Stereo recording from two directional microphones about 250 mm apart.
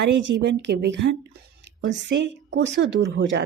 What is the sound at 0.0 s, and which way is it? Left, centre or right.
A woman's voice, right.